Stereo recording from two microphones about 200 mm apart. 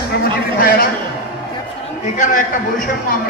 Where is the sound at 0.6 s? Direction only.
45° left (ahead or behind).